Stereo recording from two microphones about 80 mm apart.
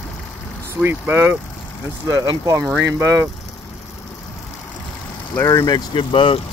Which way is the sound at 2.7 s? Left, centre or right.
Right.